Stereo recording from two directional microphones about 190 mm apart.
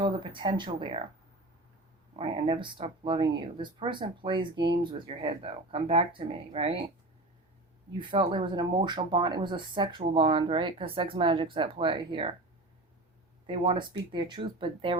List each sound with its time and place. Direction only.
0.0 s speech: 25° right (ahead or behind)
2.1 s speech: 30° right (ahead or behind)
7.9 s speech: 25° right (ahead or behind)
13.5 s speech: 25° right (ahead or behind)